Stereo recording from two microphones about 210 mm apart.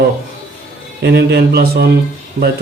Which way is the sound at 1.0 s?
50° right (ahead or behind).